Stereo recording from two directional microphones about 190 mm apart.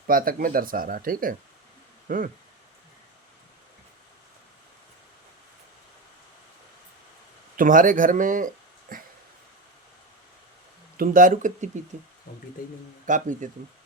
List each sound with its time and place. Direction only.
0.1 s speech: 50° right (ahead or behind)
7.5 s speech: 45° right (ahead or behind)
8.9 s a sound: 45° right (ahead or behind)
10.9 s speech: 45° right (ahead or behind)
12.3 s speech: 50° left (ahead or behind)
13.1 s speech: 40° right (ahead or behind)